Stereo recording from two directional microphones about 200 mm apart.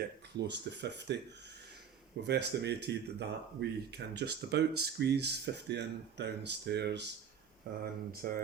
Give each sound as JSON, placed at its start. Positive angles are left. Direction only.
{"t": 0.3, "sound": "speech", "side_deg": -60}
{"t": 2.2, "sound": "speech", "side_deg": -60}